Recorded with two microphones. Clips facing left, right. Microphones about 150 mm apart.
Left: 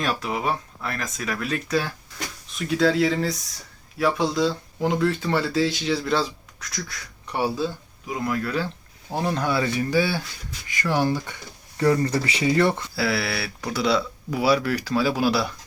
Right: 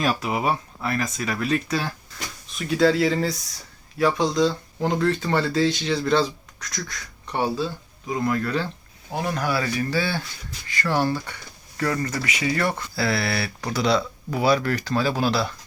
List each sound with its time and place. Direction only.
0.0 s speech: 5° right (ahead or behind)
8.0 s speech: 5° left (ahead or behind)
9.1 s speech: 25° left (ahead or behind)
11.8 s speech: 30° left (ahead or behind)
13.0 s speech: 5° left (ahead or behind)